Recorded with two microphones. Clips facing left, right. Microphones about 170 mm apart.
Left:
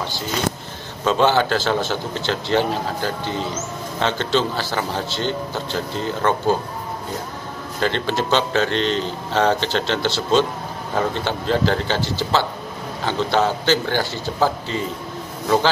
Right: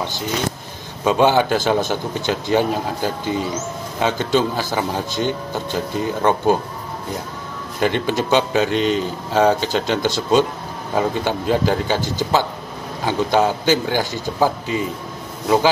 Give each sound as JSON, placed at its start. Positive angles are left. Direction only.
{"t": 1.0, "sound": "a man's voice", "side_deg": -15}
{"t": 7.8, "sound": "a man's voice", "side_deg": -15}